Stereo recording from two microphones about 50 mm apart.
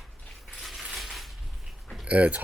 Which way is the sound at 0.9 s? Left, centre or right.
Centre.